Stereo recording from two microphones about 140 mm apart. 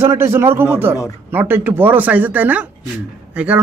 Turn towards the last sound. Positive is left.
turn(degrees=-10)  # may be behind; listen again after turning